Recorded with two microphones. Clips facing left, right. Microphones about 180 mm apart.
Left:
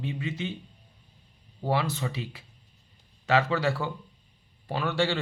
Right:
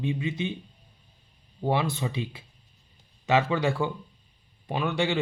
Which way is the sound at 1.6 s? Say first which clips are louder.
Right 2 dB; 25° right (ahead or behind).